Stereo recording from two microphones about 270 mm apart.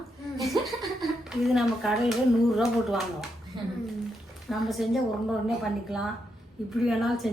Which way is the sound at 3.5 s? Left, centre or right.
Centre.